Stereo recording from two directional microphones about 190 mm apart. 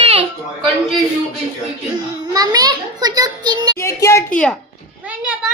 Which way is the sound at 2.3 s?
20° right (ahead or behind).